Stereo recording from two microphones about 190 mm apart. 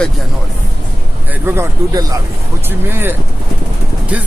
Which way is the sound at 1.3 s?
15° right (ahead or behind).